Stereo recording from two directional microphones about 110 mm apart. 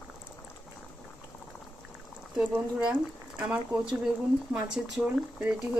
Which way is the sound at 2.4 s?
10° right (ahead or behind).